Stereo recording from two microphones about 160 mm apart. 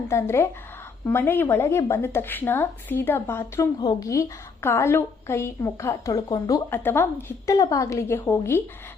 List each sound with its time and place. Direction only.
0.1 s a woman's voice: 15° left (ahead or behind)